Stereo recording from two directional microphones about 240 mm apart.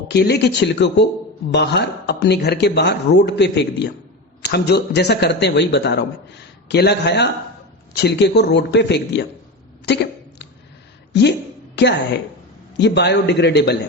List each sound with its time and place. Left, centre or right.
0.1 s speech: left
9.8 s a sound: left
11.1 s speech: left